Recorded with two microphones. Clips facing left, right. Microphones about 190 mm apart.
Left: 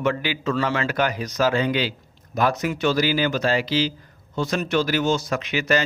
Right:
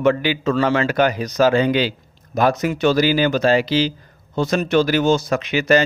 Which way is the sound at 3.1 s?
65° right (ahead or behind).